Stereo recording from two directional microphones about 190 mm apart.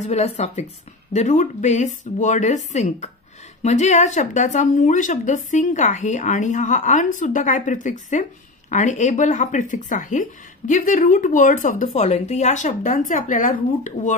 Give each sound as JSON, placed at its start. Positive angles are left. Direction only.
{"t": 0.0, "sound": "speech", "side_deg": 35}